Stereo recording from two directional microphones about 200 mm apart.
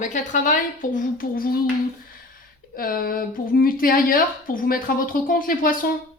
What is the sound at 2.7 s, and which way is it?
Speech, 45° left (ahead or behind).